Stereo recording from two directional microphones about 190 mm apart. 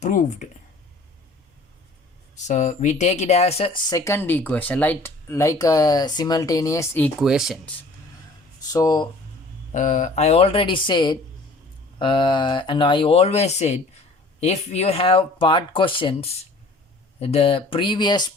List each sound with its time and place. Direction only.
0.0 s speech: 40° left (ahead or behind)
2.3 s speech: 40° left (ahead or behind); by 7.1 s 15° left (ahead or behind)
7.2 s speech: centre (ahead or behind)
8.7 s speech: 20° left (ahead or behind)
9.7 s speech: 40° left (ahead or behind); by 18.3 s 25° left (ahead or behind)